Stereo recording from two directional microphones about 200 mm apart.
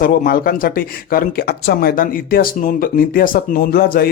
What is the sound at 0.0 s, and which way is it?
Speech, 45° left (ahead or behind).